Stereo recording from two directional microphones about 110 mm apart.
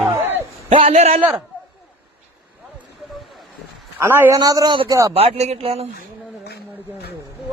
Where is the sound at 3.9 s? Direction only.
20° right (ahead or behind).